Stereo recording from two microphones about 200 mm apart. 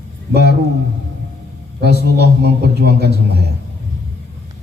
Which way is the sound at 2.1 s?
55° right (ahead or behind).